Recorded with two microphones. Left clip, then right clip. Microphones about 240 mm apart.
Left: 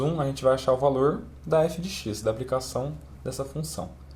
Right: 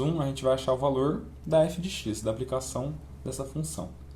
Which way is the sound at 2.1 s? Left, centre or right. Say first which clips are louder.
Left 1 dB; left.